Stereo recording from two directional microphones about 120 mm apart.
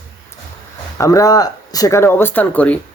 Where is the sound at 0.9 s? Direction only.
30° left (ahead or behind); by 2.8 s 10° left (ahead or behind).